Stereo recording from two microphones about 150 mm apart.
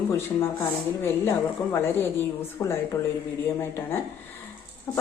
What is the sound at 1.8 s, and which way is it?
Speech, 15° left (ahead or behind).